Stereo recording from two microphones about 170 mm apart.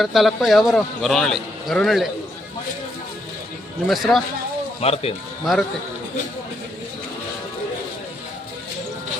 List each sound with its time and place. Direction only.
0.0 s a man's voice: centre (ahead or behind)
3.8 s a man's voice: centre (ahead or behind)
4.8 s speech: 35° left (ahead or behind)
5.5 s a man's voice: centre (ahead or behind)